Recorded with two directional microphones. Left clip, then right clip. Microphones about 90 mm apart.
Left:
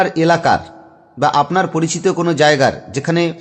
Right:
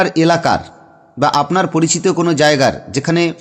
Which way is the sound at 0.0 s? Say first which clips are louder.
Even; 40° right (ahead or behind).